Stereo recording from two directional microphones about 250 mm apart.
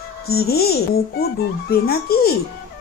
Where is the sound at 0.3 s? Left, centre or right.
Left.